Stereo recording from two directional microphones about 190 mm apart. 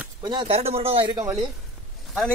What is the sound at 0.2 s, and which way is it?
Speech, 25° right (ahead or behind).